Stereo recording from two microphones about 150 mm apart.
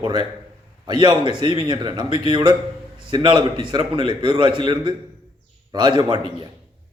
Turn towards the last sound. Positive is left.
turn(degrees=-30)  # may be behind; listen again after turning